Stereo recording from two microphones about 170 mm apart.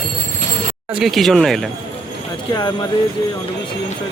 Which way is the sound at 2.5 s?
25° left (ahead or behind).